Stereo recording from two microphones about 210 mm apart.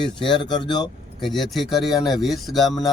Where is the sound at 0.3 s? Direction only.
20° left (ahead or behind).